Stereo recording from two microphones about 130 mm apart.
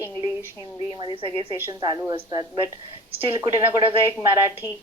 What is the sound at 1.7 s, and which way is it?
Speech, 30° right (ahead or behind).